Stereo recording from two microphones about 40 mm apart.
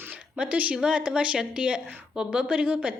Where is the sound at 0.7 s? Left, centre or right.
Right.